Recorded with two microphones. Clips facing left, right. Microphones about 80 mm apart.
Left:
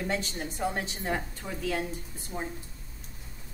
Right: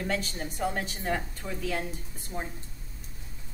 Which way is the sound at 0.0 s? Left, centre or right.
Centre.